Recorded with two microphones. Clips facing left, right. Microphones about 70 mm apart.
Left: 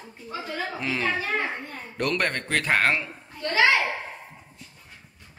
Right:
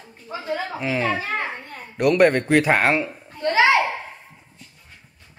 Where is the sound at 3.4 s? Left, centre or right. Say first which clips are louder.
Right 4 dB; right.